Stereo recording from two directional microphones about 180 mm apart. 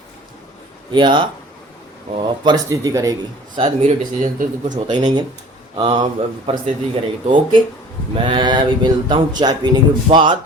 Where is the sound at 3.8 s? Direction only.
40° right (ahead or behind).